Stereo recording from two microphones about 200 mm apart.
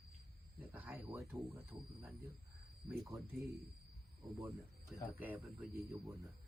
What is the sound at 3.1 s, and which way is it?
Speech, centre (ahead or behind).